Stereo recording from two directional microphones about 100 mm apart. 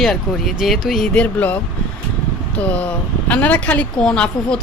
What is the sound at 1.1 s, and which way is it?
Speech, 15° left (ahead or behind).